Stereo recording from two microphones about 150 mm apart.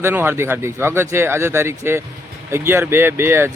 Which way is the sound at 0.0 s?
15° right (ahead or behind).